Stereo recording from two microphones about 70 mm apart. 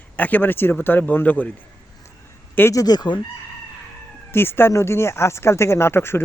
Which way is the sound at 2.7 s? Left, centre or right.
Left.